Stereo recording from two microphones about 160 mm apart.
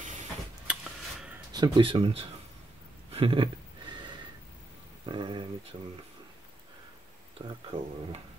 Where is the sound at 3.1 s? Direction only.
35° right (ahead or behind).